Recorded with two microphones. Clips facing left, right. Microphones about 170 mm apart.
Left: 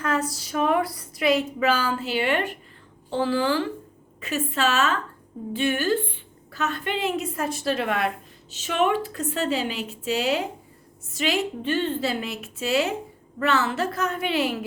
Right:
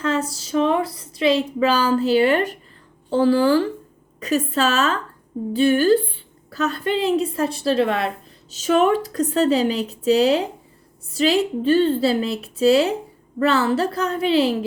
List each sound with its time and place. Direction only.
0.0 s a woman's voice: 25° right (ahead or behind)